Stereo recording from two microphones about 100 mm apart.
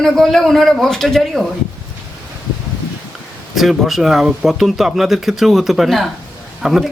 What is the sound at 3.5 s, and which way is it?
Speech, centre (ahead or behind).